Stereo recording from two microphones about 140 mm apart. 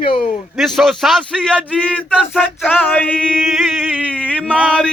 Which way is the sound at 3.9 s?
10° right (ahead or behind).